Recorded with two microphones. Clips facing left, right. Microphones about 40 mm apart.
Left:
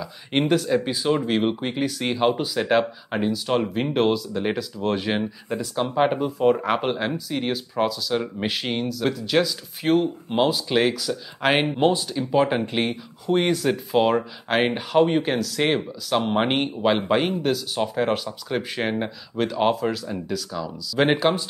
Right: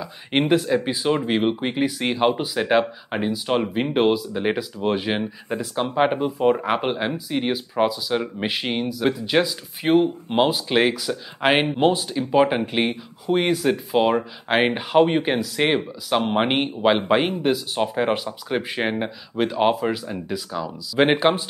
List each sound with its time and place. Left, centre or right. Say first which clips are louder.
0.5 s speech: right 1 dB; centre